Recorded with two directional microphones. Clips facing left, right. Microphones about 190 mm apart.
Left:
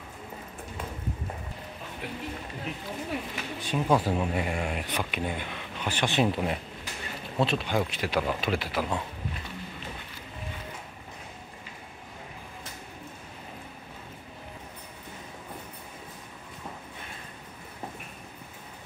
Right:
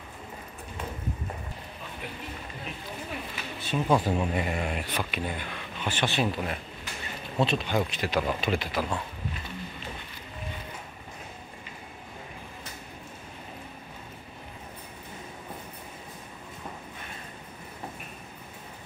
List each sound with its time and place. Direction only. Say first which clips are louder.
3.6 s speech: even; 10° left (ahead or behind)
4.7 s speech: even; 15° left (ahead or behind)
7.3 s speech: even; 5° left (ahead or behind)
8.2 s speech: even; centre (ahead or behind)